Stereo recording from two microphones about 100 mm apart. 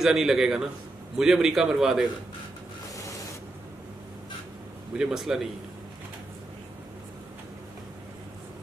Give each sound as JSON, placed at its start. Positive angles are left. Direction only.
{"t": 0.0, "sound": "a man's voice", "side_deg": -5}
{"t": 4.9, "sound": "a man's voice", "side_deg": -5}